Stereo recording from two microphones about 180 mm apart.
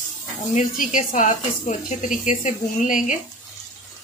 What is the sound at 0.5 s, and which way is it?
A woman's voice, 45° left (ahead or behind).